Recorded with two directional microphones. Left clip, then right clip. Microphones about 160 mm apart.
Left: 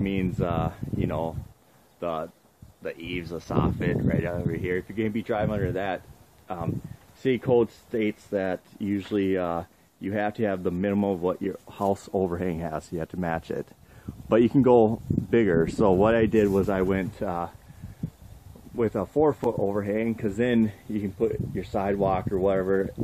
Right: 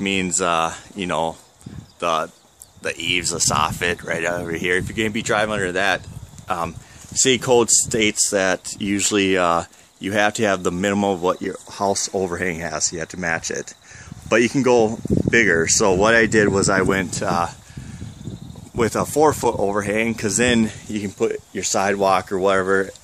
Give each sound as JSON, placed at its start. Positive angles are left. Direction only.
{"t": 0.0, "sound": "speech", "side_deg": -25}
{"t": 18.8, "sound": "speech", "side_deg": -20}